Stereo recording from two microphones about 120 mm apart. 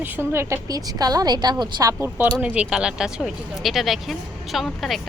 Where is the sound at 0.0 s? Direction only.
15° right (ahead or behind).